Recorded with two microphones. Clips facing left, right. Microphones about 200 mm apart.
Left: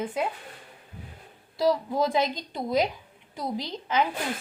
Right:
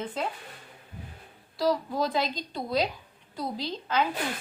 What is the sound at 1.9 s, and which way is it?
A woman's voice, 20° left (ahead or behind).